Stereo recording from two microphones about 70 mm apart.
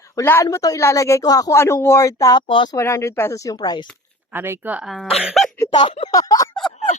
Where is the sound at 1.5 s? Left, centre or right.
Left.